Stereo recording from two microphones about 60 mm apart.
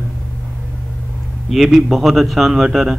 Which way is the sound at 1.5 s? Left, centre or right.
Centre.